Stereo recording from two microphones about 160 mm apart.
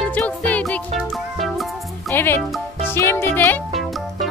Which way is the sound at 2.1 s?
15° left (ahead or behind).